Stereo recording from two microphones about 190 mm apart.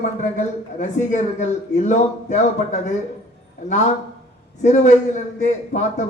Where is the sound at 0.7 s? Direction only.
40° left (ahead or behind).